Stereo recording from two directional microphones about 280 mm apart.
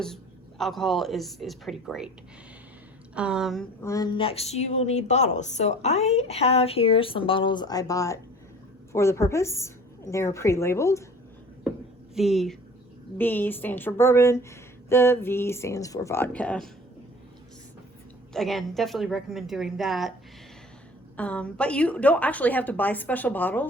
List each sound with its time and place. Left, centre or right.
0.6 s a woman's voice: centre
3.2 s a woman's voice: centre
12.1 s a woman's voice: centre
18.3 s a woman's voice: centre
21.2 s a woman's voice: centre